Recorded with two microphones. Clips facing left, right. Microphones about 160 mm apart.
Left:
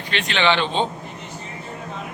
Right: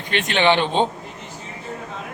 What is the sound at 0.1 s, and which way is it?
Speech, 50° right (ahead or behind).